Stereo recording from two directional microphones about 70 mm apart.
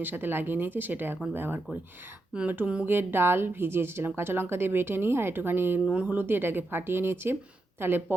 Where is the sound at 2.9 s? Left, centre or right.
Right.